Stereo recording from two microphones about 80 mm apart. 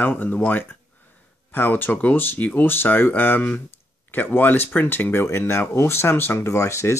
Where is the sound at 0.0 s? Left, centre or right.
Left.